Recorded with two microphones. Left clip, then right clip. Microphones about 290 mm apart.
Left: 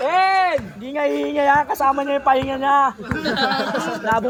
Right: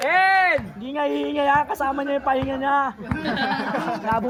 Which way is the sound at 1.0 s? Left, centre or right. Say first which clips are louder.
Left 3 dB; centre.